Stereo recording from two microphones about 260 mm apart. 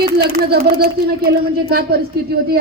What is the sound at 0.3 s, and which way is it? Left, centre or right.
Speech, right.